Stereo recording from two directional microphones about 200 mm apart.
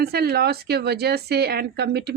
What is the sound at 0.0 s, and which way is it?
Speech, 50° right (ahead or behind).